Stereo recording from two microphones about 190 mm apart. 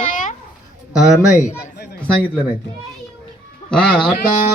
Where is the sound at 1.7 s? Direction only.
65° left (ahead or behind).